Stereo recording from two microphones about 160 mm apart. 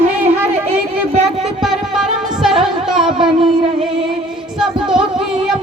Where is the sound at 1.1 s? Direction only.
45° right (ahead or behind).